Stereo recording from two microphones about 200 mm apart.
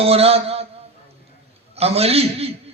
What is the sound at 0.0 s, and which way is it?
Mantra, 30° right (ahead or behind).